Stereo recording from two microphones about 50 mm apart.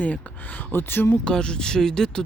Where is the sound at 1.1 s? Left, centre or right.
Centre.